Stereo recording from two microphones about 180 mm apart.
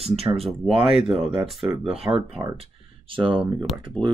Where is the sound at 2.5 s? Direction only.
30° right (ahead or behind).